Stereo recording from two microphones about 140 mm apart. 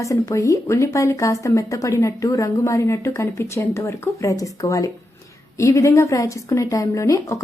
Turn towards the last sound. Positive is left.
turn(degrees=25)  # may be behind; listen again after turning